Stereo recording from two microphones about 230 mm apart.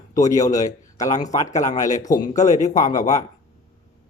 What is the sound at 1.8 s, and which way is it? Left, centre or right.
Speech, centre.